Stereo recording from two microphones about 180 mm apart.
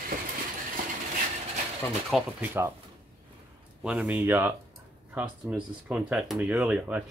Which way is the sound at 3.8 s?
5° right (ahead or behind).